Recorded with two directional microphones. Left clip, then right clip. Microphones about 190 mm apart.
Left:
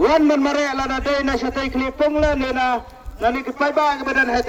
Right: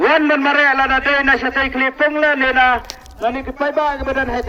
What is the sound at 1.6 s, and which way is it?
A man's voice, 75° left (ahead or behind).